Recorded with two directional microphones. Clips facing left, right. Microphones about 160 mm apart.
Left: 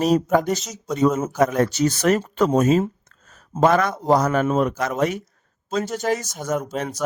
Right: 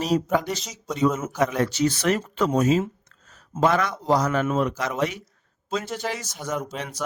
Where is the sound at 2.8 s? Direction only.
45° left (ahead or behind).